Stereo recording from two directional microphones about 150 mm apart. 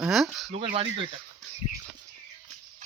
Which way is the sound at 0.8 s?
35° right (ahead or behind).